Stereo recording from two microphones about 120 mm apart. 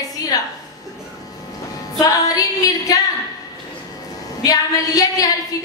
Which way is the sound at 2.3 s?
30° left (ahead or behind).